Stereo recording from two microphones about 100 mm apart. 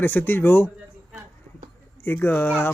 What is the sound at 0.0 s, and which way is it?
Speech, 20° left (ahead or behind).